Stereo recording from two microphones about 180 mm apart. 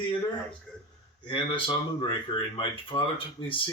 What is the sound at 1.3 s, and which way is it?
Speech, 25° left (ahead or behind).